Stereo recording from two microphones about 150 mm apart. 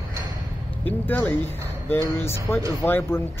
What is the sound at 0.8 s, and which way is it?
Speech, 10° left (ahead or behind).